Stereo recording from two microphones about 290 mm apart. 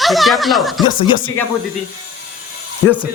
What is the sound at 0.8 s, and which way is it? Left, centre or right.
Speech, centre.